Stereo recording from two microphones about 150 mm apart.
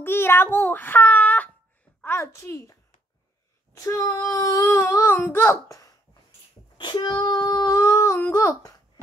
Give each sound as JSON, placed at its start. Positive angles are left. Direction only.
{"t": 0.0, "sound": "a child's voice", "side_deg": 15}
{"t": 6.8, "sound": "child singing", "side_deg": 30}